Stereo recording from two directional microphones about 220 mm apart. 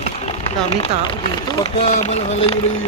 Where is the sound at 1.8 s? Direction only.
30° left (ahead or behind).